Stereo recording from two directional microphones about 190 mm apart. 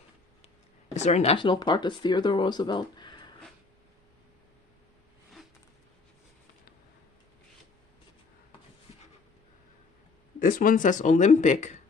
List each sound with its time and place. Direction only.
0.9 s speech: 35° left (ahead or behind)
10.4 s speech: 45° left (ahead or behind)